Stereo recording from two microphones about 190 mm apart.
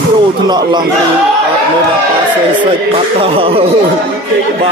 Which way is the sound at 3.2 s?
30° right (ahead or behind).